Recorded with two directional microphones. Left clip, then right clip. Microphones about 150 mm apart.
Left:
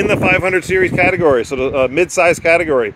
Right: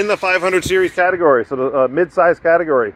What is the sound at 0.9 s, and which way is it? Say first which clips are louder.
Speech: even; 35° left (ahead or behind).